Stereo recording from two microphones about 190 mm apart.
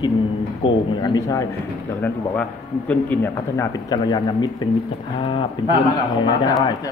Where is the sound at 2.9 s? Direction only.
10° left (ahead or behind).